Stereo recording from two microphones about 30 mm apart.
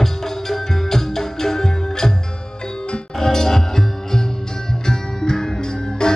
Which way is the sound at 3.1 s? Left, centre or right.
Centre.